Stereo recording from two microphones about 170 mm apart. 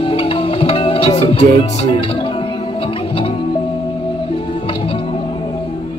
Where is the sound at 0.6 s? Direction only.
30° left (ahead or behind).